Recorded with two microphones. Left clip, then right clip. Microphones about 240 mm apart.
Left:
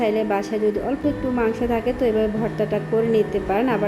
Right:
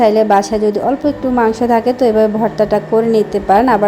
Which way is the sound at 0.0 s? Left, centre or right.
Right.